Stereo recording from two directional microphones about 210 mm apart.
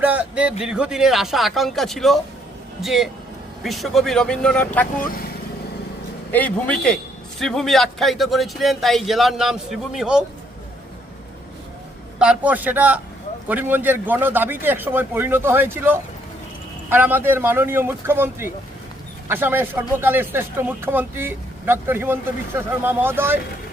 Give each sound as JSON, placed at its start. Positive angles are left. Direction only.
{"t": 0.0, "sound": "a sound", "side_deg": -5}
{"t": 0.6, "sound": "a man's voice", "side_deg": -5}
{"t": 4.9, "sound": "speech", "side_deg": 45}
{"t": 6.3, "sound": "a man's voice", "side_deg": 5}
{"t": 12.2, "sound": "speech", "side_deg": -5}